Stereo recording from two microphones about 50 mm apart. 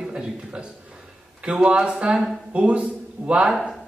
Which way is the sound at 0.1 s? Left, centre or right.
Right.